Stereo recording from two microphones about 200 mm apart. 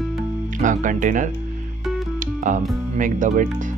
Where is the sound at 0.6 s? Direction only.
40° right (ahead or behind).